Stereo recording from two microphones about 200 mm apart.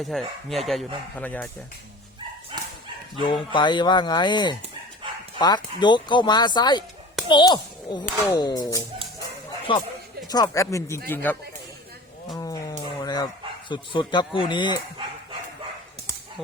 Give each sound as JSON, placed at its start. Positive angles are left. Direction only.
{"t": 0.0, "sound": "speech", "side_deg": 0}
{"t": 3.2, "sound": "a child's voice", "side_deg": 25}
{"t": 12.4, "sound": "music", "side_deg": 20}
{"t": 13.0, "sound": "dog", "side_deg": 20}
{"t": 13.7, "sound": "speech", "side_deg": 25}